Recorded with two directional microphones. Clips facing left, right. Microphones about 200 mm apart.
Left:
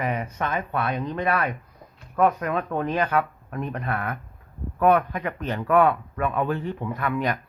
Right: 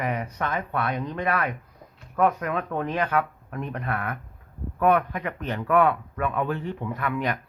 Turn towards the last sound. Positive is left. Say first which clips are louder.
# left 2 dB
turn(degrees=40)  # may be behind; listen again after turning